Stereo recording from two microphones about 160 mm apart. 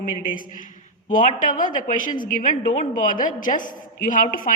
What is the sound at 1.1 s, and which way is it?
A woman's voice, 55° left (ahead or behind).